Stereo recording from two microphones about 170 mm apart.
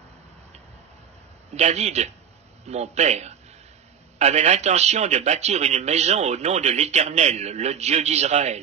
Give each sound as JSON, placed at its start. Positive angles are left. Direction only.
{"t": 1.5, "sound": "a man's voice", "side_deg": -40}